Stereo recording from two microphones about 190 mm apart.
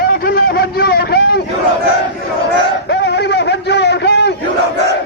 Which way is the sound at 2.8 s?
60° left (ahead or behind).